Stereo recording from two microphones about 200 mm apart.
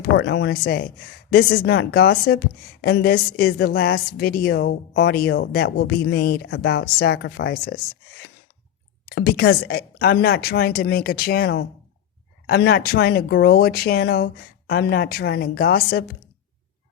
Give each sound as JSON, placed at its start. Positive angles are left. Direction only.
{"t": 0.0, "sound": "a woman's voice", "side_deg": 55}
{"t": 9.0, "sound": "a woman's voice", "side_deg": 55}